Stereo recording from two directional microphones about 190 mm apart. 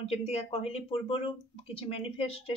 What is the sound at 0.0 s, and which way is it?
Speech, 30° left (ahead or behind).